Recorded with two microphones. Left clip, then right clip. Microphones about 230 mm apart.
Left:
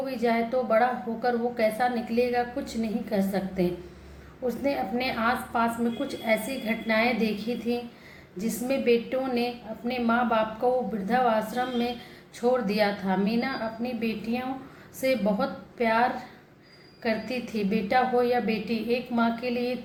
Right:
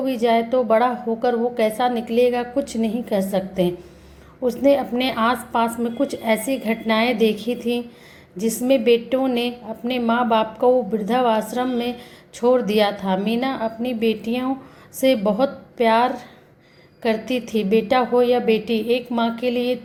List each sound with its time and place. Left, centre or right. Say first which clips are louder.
0.1 s a woman's voice: right 8 dB; right